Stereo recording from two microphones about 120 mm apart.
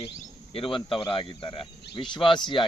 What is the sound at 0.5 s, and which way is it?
Speech, 45° left (ahead or behind).